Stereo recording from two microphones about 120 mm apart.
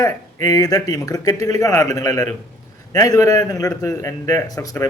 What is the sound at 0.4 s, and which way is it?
A man's voice, 30° left (ahead or behind).